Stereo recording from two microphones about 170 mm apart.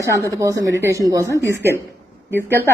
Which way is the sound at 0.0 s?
15° right (ahead or behind).